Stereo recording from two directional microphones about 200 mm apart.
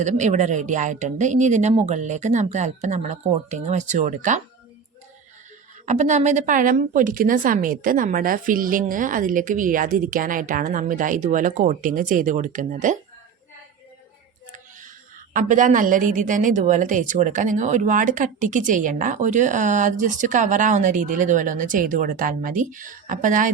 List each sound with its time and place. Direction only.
0.0 s a woman's voice: 35° right (ahead or behind)
5.8 s a woman's voice: 35° right (ahead or behind)
15.3 s a woman's voice: 40° right (ahead or behind)